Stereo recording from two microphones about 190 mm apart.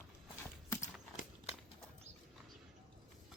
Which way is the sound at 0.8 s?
40° left (ahead or behind).